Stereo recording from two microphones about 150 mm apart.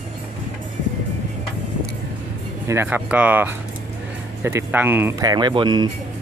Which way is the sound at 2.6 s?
15° right (ahead or behind).